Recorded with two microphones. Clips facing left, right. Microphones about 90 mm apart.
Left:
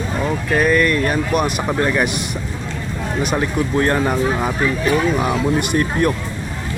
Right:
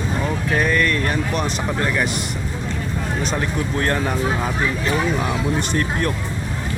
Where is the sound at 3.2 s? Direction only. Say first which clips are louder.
Left 6 dB; 15° left (ahead or behind).